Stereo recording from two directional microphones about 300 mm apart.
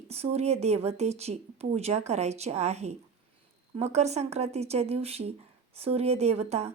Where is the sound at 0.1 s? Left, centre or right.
Right.